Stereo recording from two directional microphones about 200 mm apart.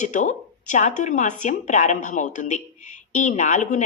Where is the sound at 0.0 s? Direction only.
40° left (ahead or behind).